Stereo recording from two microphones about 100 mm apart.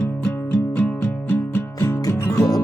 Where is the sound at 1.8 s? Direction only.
35° left (ahead or behind).